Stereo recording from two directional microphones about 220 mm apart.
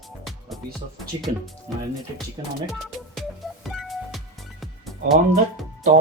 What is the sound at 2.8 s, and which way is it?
Music, centre (ahead or behind).